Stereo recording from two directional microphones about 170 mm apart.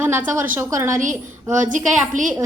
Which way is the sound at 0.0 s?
10° right (ahead or behind).